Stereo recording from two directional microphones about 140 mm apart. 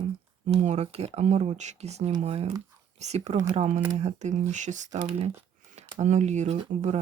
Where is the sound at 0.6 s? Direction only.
55° right (ahead or behind).